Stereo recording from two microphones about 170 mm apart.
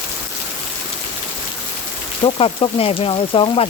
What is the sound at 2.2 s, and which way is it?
Speech, 30° left (ahead or behind).